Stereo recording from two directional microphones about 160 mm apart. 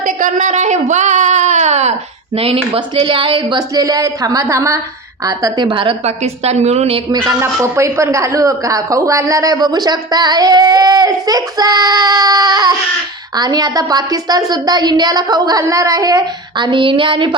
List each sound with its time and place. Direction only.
0.0 s a sound: 55° right (ahead or behind)
2.3 s a woman's voice: 35° right (ahead or behind)
7.1 s a man's voice: 20° right (ahead or behind)